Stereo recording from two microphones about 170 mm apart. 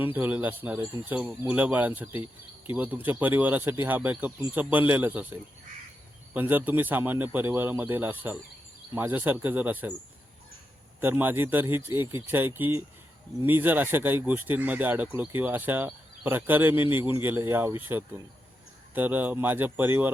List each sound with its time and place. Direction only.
0.0 s speech: 10° right (ahead or behind)
11.0 s speech: 10° right (ahead or behind)